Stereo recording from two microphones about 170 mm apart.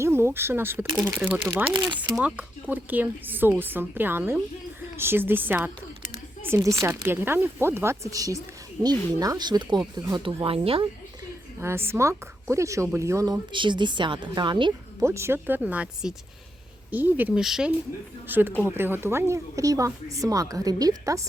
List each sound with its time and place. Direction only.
0.0 s a woman's voice: 15° right (ahead or behind)
1.7 s speech: 25° right (ahead or behind)
2.1 s a woman's voice: 10° right (ahead or behind)
10.4 s speech: 35° right (ahead or behind)
11.6 s speech: 15° right (ahead or behind)
15.0 s a woman's voice: 15° right (ahead or behind)